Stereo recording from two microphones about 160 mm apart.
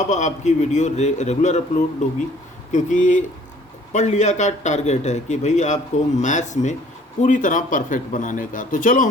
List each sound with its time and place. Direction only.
0.1 s a man's voice: 50° left (ahead or behind)